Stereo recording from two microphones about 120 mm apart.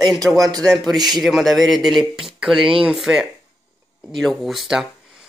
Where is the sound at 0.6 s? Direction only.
5° left (ahead or behind).